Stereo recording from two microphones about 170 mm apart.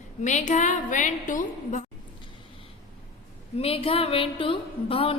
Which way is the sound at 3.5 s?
35° left (ahead or behind).